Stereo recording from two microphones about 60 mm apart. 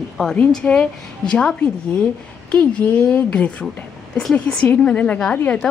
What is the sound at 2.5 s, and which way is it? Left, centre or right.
A woman's voice, left.